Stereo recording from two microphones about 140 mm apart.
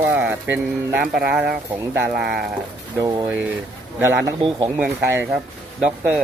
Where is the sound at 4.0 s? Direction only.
20° right (ahead or behind).